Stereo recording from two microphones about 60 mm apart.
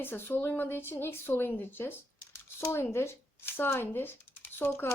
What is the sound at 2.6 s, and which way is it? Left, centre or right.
Speech, left.